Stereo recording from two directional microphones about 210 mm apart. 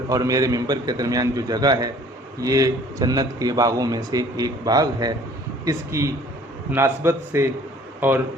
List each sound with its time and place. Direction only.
0.1 s a man's voice: 15° right (ahead or behind)